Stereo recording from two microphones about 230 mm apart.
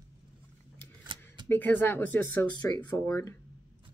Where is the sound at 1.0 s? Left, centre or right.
Centre.